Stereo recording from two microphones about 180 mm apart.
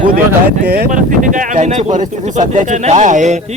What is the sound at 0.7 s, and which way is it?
Speech, 50° right (ahead or behind).